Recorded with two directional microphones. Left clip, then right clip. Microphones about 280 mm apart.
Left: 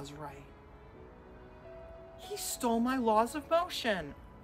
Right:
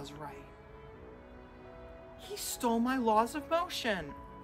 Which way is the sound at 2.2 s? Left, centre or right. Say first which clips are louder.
Even; centre.